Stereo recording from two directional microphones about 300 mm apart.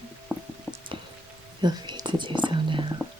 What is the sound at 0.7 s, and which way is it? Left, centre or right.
Drip, centre.